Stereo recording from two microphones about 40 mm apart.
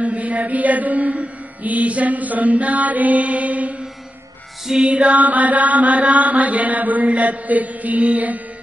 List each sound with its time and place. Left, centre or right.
0.0 s mantra: right
4.7 s chant: right